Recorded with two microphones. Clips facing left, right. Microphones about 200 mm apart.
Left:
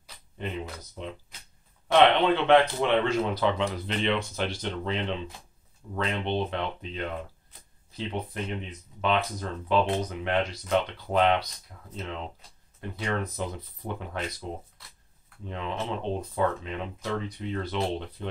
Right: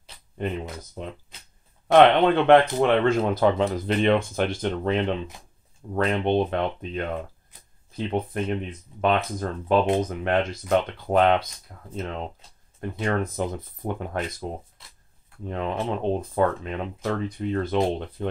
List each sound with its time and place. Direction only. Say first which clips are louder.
1.9 s speech: right 4 dB; 50° right (ahead or behind)